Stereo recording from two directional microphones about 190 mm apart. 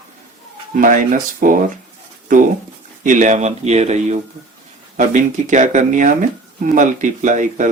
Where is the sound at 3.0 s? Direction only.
40° right (ahead or behind).